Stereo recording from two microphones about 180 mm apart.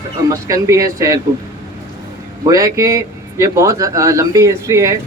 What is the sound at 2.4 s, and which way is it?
Speech, 20° right (ahead or behind).